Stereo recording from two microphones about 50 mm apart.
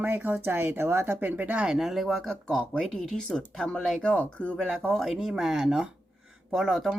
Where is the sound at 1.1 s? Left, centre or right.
Right.